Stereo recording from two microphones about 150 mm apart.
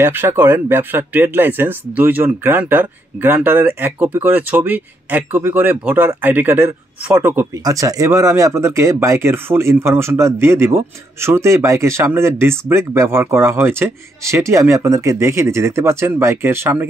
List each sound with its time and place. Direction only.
0.0 s speech: 15° right (ahead or behind)